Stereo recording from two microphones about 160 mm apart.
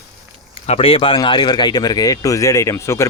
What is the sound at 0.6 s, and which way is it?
Speech, 35° left (ahead or behind).